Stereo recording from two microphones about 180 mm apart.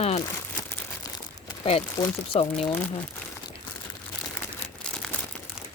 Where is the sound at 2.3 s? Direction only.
35° left (ahead or behind).